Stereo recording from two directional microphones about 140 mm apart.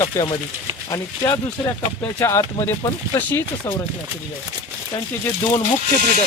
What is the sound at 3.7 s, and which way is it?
Speech, 15° left (ahead or behind).